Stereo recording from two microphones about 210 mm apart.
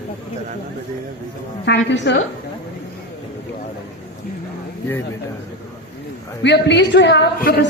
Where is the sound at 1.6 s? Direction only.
55° left (ahead or behind).